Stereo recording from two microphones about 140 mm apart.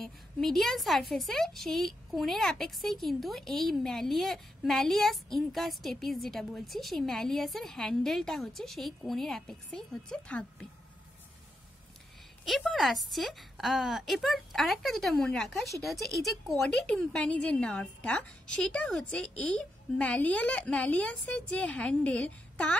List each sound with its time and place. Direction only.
0.0 s a woman's voice: 5° left (ahead or behind)
12.4 s a woman's voice: centre (ahead or behind)